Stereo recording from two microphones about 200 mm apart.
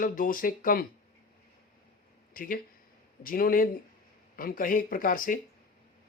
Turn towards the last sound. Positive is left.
turn(degrees=45)  # may be behind; listen again after turning